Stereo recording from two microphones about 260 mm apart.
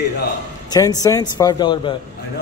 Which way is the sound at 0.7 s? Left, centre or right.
Centre.